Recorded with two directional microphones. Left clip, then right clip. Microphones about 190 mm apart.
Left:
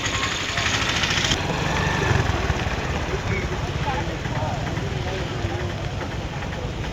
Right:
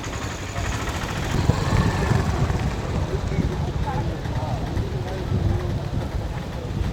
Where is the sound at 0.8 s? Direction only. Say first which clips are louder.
Left 7 dB; 45° right (ahead or behind).